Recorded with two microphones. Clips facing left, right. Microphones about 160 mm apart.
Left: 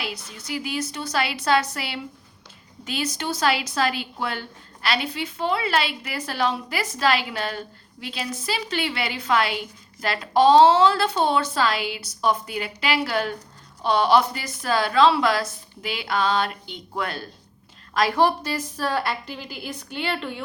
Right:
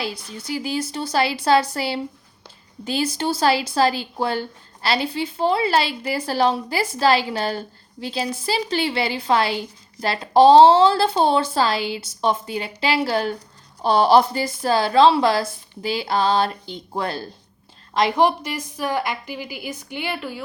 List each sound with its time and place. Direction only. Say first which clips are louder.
0.0 s a woman's voice: right 4 dB; 30° right (ahead or behind)
17.9 s a woman's voice: right 2 dB; 20° right (ahead or behind)